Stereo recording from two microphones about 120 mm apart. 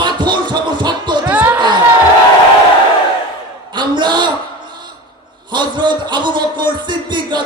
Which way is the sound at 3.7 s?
40° right (ahead or behind).